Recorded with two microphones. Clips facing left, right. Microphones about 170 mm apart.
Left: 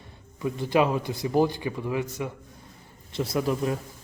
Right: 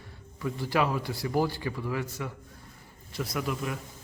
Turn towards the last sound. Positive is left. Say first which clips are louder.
# left 6 dB
turn(degrees=30)  # may be behind; listen again after turning